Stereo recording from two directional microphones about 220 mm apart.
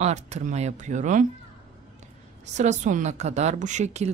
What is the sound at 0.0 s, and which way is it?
A woman's voice, 30° right (ahead or behind).